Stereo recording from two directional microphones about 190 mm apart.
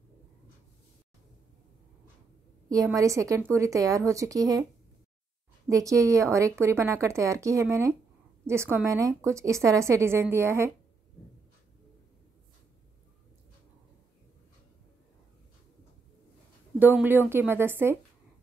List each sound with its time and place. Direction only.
2.7 s a woman's voice: 15° right (ahead or behind)
5.7 s a woman's voice: 15° right (ahead or behind)
16.7 s a woman's voice: 10° right (ahead or behind)